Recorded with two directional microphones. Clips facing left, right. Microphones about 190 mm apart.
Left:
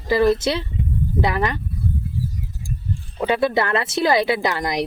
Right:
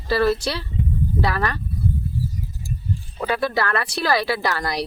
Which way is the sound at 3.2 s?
20° left (ahead or behind).